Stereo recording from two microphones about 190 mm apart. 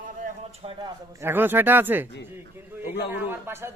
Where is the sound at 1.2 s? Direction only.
10° right (ahead or behind).